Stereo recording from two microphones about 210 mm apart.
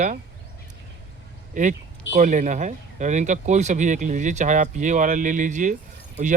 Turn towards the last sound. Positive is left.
turn(degrees=-35)  # may be behind; listen again after turning